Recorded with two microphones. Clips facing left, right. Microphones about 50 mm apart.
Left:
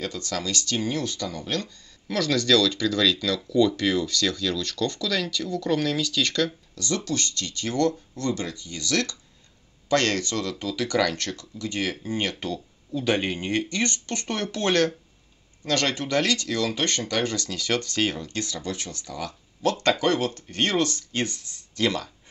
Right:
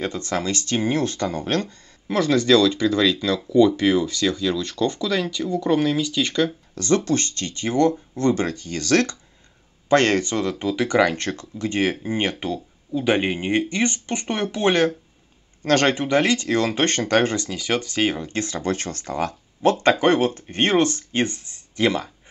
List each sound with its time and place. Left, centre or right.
0.0 s speech: right
2.0 s speech: right
6.7 s a sound: right
7.1 s speech: right
15.6 s speech: right
19.6 s speech: right